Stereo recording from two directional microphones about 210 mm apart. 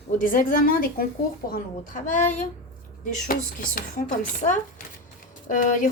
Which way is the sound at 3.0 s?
40° left (ahead or behind).